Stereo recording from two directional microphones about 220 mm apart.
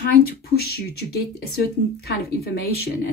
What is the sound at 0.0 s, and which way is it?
A woman's voice, 45° left (ahead or behind).